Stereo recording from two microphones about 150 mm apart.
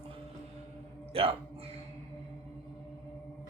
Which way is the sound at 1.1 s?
40° right (ahead or behind).